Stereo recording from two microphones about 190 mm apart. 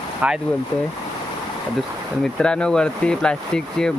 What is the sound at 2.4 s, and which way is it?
Speech, 5° left (ahead or behind).